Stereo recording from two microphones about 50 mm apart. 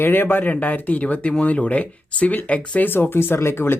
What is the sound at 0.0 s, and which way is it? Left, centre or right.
Speech, left.